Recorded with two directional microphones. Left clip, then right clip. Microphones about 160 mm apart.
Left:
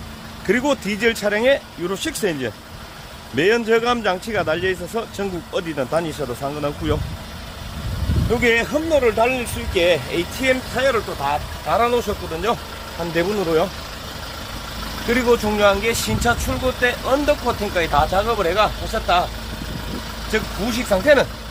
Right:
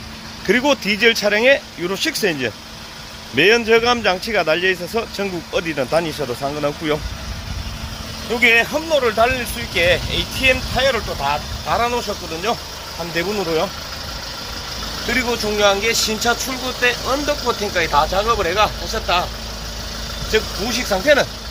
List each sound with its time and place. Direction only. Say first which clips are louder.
0.4 s speech: right 3 dB; 5° left (ahead or behind)
8.3 s speech: right 3 dB; 20° left (ahead or behind)
15.1 s speech: left 2 dB; 20° left (ahead or behind)
20.3 s speech: right 3 dB; 15° left (ahead or behind)